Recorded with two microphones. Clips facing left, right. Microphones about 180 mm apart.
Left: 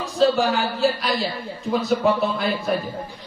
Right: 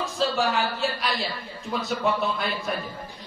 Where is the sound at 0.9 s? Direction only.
Centre (ahead or behind).